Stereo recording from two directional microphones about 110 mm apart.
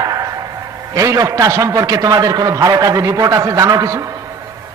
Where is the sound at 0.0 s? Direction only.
35° right (ahead or behind).